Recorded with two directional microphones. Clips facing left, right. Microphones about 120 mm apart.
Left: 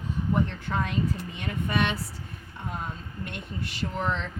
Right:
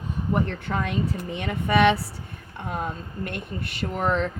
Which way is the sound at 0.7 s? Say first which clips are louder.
Right 2 dB; 85° right.